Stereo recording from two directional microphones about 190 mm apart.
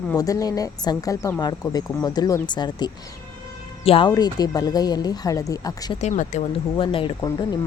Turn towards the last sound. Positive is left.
turn(degrees=20)  # may be behind; listen again after turning